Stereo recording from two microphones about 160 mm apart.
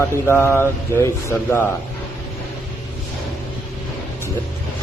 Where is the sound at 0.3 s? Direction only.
15° left (ahead or behind).